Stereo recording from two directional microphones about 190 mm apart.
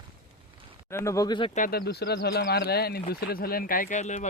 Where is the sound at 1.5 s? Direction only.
50° left (ahead or behind).